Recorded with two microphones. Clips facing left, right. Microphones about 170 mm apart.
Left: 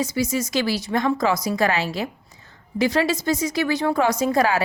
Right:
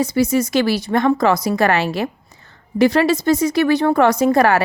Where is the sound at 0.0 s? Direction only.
60° right (ahead or behind).